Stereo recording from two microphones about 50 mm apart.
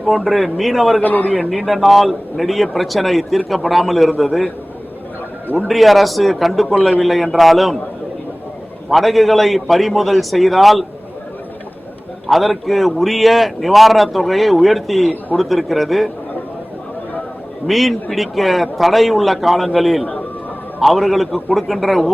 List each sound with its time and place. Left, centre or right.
0.2 s speech: centre
1.0 s a man's voice: left
1.3 s speech: centre
5.6 s speech: centre
8.9 s speech: centre
12.3 s speech: centre
17.7 s speech: centre